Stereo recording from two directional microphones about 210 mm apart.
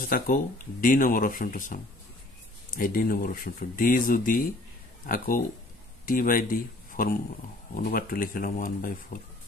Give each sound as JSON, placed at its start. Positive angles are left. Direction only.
{"t": 0.1, "sound": "speech", "side_deg": 40}
{"t": 2.8, "sound": "speech", "side_deg": 40}